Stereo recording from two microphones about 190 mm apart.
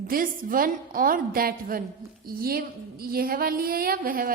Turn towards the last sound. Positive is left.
turn(degrees=-50)  # may be behind; listen again after turning